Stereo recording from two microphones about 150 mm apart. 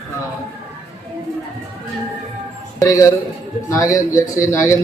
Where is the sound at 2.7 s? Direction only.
20° left (ahead or behind).